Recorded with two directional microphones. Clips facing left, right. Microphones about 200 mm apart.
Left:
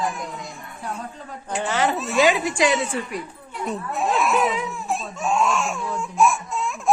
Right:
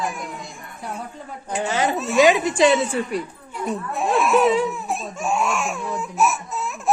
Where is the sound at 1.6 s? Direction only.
15° right (ahead or behind).